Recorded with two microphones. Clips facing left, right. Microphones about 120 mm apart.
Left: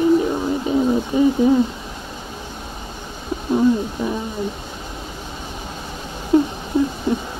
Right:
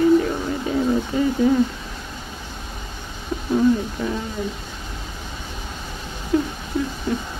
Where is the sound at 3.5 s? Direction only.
20° left (ahead or behind).